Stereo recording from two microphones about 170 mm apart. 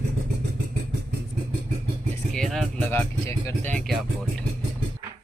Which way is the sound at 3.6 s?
45° right (ahead or behind).